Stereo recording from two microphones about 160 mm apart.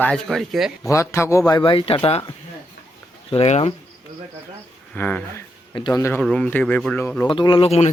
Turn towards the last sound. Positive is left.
turn(degrees=40)  # may be behind; listen again after turning